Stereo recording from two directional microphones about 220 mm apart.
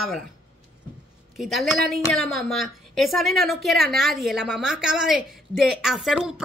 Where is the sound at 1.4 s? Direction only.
Centre (ahead or behind).